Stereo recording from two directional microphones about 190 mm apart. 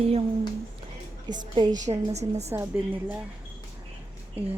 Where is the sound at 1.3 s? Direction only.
20° right (ahead or behind).